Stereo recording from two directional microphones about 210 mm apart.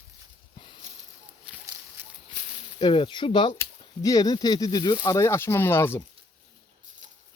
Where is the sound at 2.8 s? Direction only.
25° left (ahead or behind).